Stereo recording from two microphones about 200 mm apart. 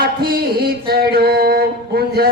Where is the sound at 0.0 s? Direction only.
50° right (ahead or behind).